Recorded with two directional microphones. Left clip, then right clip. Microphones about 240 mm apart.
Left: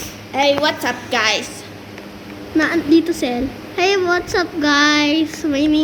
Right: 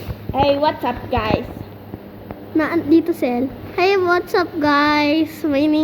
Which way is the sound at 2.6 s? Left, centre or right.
Centre.